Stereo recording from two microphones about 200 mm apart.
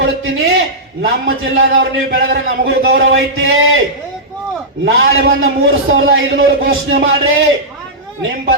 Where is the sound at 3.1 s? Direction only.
70° right (ahead or behind).